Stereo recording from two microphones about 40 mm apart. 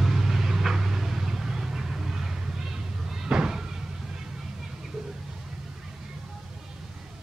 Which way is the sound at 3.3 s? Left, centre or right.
Centre.